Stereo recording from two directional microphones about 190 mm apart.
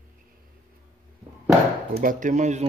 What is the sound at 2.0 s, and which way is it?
Speech, 40° right (ahead or behind).